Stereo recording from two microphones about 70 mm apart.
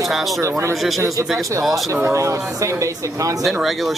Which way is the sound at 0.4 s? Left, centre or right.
Right.